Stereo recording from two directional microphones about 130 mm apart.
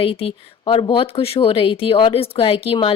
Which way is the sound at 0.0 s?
50° left (ahead or behind).